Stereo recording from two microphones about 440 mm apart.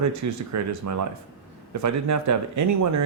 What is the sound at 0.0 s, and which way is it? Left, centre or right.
Speech, right.